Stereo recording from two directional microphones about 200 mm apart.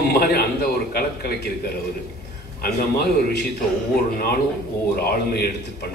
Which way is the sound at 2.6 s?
50° left (ahead or behind).